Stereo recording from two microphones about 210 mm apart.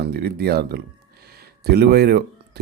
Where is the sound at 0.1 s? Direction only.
50° right (ahead or behind).